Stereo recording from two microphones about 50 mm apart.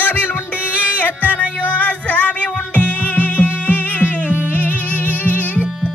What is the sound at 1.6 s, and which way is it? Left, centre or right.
Music, left.